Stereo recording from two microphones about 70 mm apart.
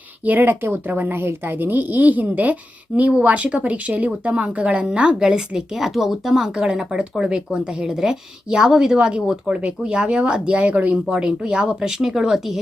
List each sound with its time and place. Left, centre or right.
0.3 s speech: right; by 6.7 s centre
6.7 s speech: centre
11.0 s speech: centre